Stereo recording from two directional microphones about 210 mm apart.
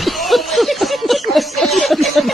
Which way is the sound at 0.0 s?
Centre (ahead or behind).